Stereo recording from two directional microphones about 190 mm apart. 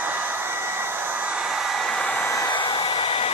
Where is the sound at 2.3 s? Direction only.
20° left (ahead or behind).